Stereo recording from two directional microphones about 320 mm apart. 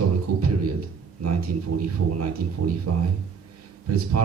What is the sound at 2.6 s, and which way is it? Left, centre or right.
Speech, right.